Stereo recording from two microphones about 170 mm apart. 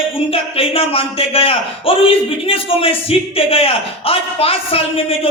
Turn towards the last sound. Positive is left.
turn(degrees=35)  # may be behind; listen again after turning